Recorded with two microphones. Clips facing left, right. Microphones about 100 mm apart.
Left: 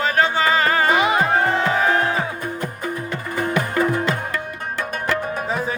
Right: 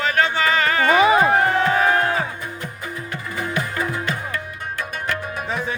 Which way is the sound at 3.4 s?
50° left (ahead or behind).